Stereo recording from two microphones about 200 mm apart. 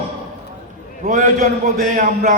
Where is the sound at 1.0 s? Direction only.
40° right (ahead or behind).